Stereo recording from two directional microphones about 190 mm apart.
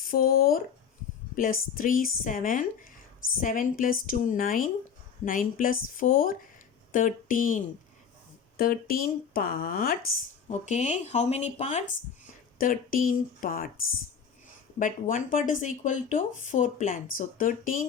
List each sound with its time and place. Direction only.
0.0 s speech: 50° left (ahead or behind)
10.7 s speech: 40° left (ahead or behind)
12.5 s speech: 50° left (ahead or behind)
14.8 s speech: 45° left (ahead or behind)